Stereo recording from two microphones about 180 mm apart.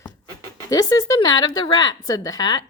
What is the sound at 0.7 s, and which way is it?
Speech, 20° left (ahead or behind).